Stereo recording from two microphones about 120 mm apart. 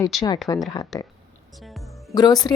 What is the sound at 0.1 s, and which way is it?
Speech, centre (ahead or behind).